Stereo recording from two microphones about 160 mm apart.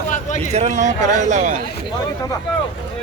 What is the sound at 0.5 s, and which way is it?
Speech, 45° right (ahead or behind).